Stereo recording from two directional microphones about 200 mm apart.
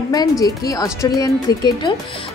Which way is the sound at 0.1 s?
20° left (ahead or behind).